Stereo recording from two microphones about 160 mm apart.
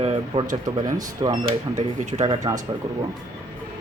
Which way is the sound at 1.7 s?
50° right (ahead or behind).